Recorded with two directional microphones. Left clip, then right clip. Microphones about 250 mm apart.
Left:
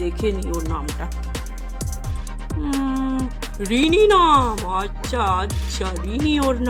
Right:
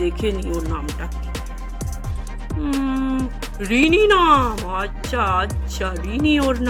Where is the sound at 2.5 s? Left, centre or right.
Centre.